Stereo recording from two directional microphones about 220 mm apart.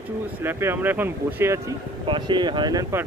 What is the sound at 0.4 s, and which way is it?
Speech, 10° right (ahead or behind).